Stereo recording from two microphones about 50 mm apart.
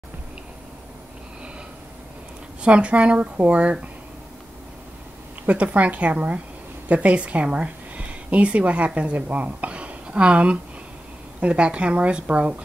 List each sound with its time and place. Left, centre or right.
2.6 s speech: right
5.5 s a woman's voice: right